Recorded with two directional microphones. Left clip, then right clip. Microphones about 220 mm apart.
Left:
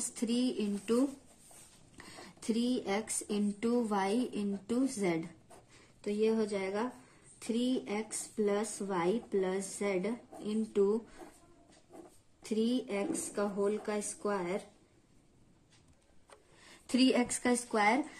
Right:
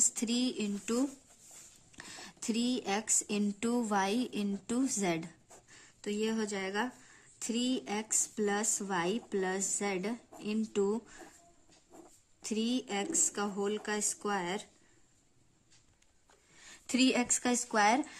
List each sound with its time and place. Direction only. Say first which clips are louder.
0.0 s speech: right 2 dB; 30° right (ahead or behind)
2.0 s speech: right 3 dB; 35° right (ahead or behind)
12.4 s speech: left 2 dB; 35° right (ahead or behind)
16.9 s a woman's voice: even; 25° right (ahead or behind)